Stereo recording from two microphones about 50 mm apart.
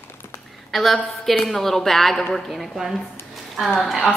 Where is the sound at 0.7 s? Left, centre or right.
Centre.